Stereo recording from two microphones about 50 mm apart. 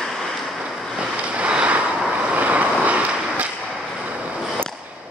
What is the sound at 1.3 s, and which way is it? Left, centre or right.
Vehicle, right.